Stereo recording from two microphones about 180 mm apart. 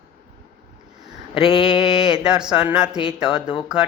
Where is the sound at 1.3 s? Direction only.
30° left (ahead or behind).